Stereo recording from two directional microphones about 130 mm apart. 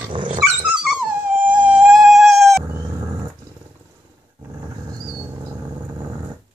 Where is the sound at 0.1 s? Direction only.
40° right (ahead or behind).